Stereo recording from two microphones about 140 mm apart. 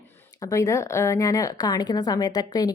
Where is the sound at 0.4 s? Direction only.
20° left (ahead or behind).